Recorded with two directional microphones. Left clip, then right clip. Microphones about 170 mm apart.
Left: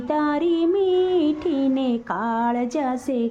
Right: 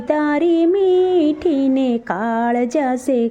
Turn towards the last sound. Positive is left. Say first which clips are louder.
# right 6 dB
turn(degrees=-25)  # may be behind; listen again after turning